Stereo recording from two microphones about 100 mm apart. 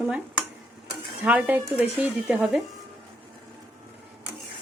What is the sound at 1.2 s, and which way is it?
Speech, 15° right (ahead or behind).